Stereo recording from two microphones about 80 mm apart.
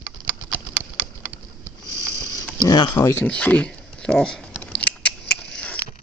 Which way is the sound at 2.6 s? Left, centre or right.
Left.